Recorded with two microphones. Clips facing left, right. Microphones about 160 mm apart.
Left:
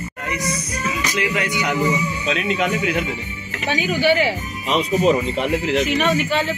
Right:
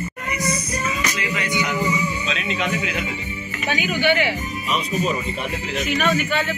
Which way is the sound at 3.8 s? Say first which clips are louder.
Left 3 dB; 35° left (ahead or behind).